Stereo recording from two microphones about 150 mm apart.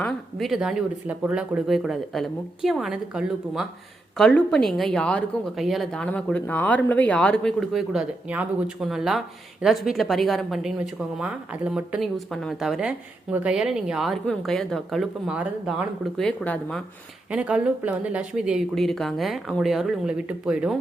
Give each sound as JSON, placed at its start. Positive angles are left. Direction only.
{"t": 0.0, "sound": "a woman's voice", "side_deg": 5}
{"t": 16.1, "sound": "speech", "side_deg": 5}
{"t": 17.3, "sound": "speech", "side_deg": -10}